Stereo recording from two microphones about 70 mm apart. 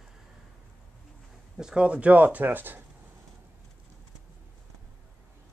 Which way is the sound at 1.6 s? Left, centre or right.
Centre.